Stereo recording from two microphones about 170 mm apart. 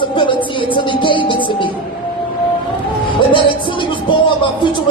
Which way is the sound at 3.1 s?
30° left (ahead or behind).